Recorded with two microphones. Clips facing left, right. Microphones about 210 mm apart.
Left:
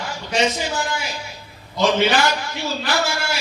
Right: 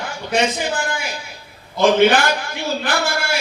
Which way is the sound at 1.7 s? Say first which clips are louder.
Right 5 dB; 55° right (ahead or behind).